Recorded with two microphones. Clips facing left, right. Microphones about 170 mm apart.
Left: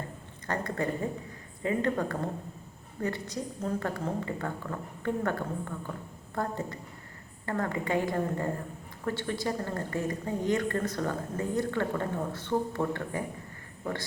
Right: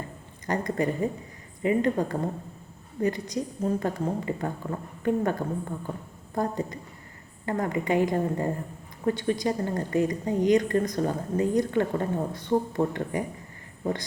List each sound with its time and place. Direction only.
0.4 s a woman's voice: 15° right (ahead or behind)